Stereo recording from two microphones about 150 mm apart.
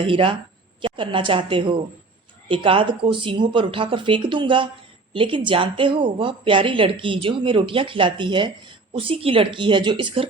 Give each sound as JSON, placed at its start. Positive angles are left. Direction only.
{"t": 0.0, "sound": "a woman's voice", "side_deg": -35}